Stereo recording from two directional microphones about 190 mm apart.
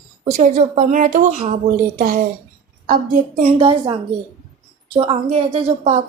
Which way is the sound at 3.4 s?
30° right (ahead or behind).